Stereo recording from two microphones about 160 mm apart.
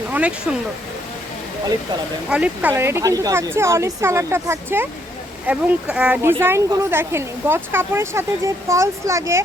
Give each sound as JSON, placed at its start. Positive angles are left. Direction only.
{"t": 0.1, "sound": "speech", "side_deg": -5}
{"t": 2.3, "sound": "speech", "side_deg": -10}